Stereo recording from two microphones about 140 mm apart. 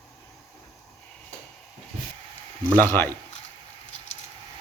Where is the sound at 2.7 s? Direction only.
15° left (ahead or behind).